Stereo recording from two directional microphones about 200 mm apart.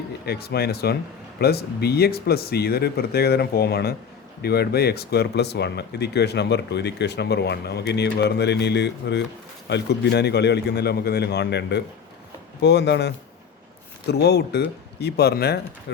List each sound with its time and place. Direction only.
0.3 s speech: 50° left (ahead or behind)